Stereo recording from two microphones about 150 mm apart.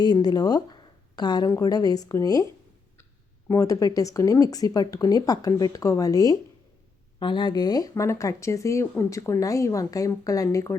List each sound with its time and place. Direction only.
0.0 s speech: 30° left (ahead or behind)
3.5 s speech: 25° left (ahead or behind)